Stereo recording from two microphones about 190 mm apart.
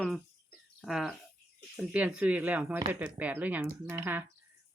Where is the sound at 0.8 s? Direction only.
Centre (ahead or behind).